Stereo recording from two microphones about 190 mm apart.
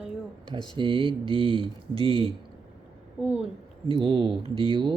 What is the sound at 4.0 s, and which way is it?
Speech, 25° right (ahead or behind).